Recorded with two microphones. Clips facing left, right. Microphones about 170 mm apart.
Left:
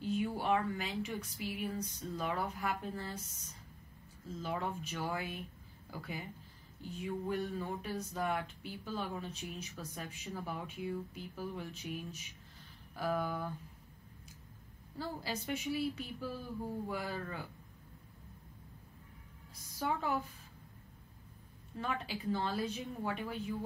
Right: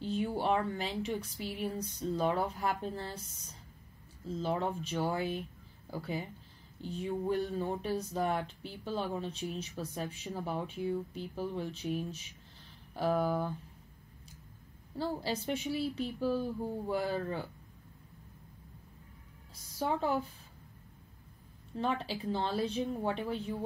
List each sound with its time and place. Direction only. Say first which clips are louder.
0.0 s speech: right 2 dB; 30° right (ahead or behind)
4.4 s speech: right 5 dB; 30° right (ahead or behind)
15.0 s speech: right 6 dB; 30° right (ahead or behind)
19.8 s speech: right 4 dB; 30° right (ahead or behind)
21.7 s speech: right 5 dB; 30° right (ahead or behind)